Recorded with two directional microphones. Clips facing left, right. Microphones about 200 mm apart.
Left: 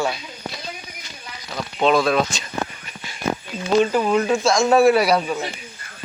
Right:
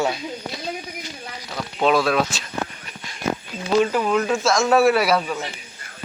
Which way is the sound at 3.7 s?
5° left (ahead or behind).